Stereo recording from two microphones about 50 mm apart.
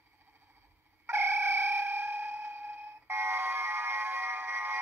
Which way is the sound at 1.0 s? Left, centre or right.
Right.